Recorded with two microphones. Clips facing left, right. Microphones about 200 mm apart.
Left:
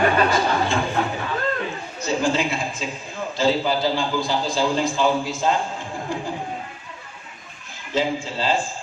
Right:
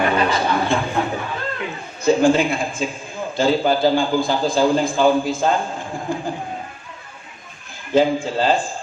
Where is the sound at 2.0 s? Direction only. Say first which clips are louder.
Right 7 dB; 55° right (ahead or behind).